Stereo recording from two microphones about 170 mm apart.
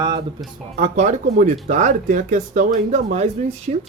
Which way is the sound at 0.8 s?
45° right (ahead or behind).